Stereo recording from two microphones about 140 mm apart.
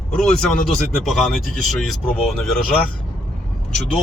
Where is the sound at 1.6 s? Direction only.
Centre (ahead or behind).